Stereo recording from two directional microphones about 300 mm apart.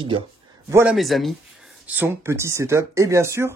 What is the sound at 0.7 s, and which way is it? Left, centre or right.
Speech, centre.